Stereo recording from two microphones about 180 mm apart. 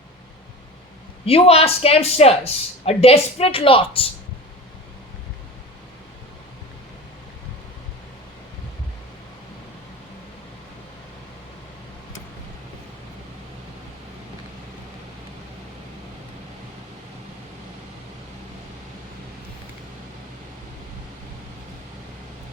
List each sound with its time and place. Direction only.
1.2 s speech: 35° left (ahead or behind)